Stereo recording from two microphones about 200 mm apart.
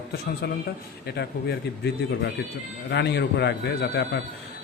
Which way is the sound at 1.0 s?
55° left (ahead or behind).